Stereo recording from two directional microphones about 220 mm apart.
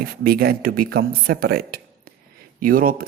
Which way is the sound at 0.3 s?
45° right (ahead or behind).